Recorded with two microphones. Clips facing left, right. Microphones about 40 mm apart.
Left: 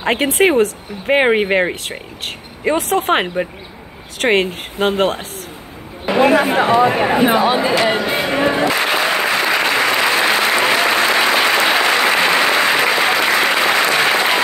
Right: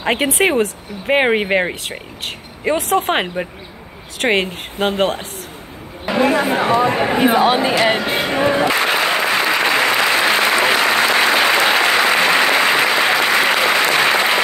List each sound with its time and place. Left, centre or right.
0.0 s speech: centre
6.0 s chatter: left
6.7 s speech: centre
7.3 s speech: right
7.6 s speech: right
8.3 s a sound: centre
8.7 s applause: centre